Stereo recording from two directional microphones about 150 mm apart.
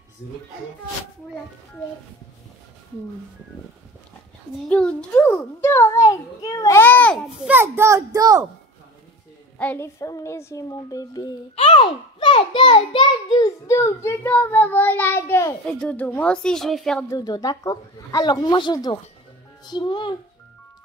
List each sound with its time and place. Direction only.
4.6 s a child's voice: 5° left (ahead or behind)
6.8 s a child's voice: 10° left (ahead or behind)
7.4 s a child's voice: 15° right (ahead or behind)
9.6 s speech: 10° left (ahead or behind)
9.9 s a child's voice: 20° left (ahead or behind); by 17.0 s 5° left (ahead or behind)
17.1 s a child's voice: 25° left (ahead or behind)